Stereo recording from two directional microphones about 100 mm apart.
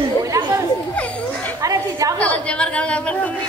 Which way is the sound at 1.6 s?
35° right (ahead or behind).